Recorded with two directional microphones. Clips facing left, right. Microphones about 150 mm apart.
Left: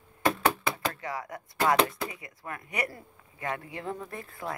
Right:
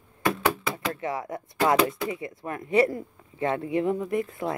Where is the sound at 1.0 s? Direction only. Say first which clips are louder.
Right 6 dB; 25° right (ahead or behind).